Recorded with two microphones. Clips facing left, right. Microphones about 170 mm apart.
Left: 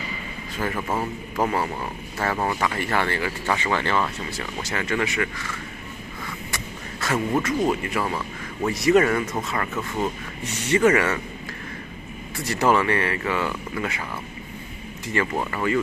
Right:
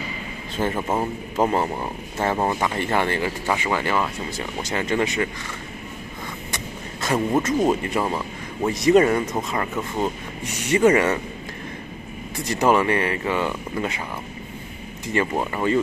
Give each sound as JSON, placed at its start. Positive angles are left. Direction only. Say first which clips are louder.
{"t": 0.6, "sound": "a man's voice", "louder": "right 3 dB", "side_deg": -25}
{"t": 12.4, "sound": "a man's voice", "louder": "right 2 dB", "side_deg": -15}
{"t": 15.1, "sound": "a man's voice", "louder": "right 2 dB", "side_deg": -20}